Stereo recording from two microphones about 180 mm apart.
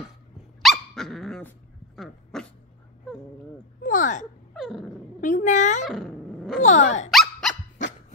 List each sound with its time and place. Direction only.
0.6 s dog: centre (ahead or behind)
3.8 s a sound: 45° left (ahead or behind)
4.6 s dog: centre (ahead or behind)
5.2 s a sound: 45° left (ahead or behind)
5.9 s dog: centre (ahead or behind)
6.6 s dog: 40° left (ahead or behind)
7.1 s dog: centre (ahead or behind)